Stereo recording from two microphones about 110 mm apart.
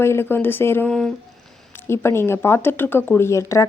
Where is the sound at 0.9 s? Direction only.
5° left (ahead or behind).